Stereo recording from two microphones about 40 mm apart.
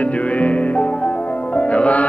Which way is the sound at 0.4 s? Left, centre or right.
Left.